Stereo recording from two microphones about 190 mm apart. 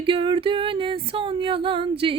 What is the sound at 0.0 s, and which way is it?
Female singing, 25° right (ahead or behind).